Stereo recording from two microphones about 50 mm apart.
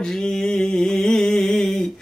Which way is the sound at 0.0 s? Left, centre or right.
Centre.